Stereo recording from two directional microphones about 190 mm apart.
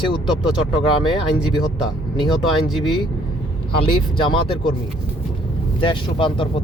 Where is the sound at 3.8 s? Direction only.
25° left (ahead or behind).